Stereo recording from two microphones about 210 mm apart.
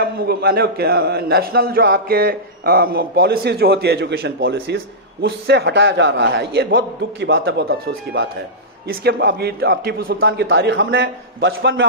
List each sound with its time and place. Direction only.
0.0 s a man's voice: 50° right (ahead or behind); by 11.9 s 65° right (ahead or behind)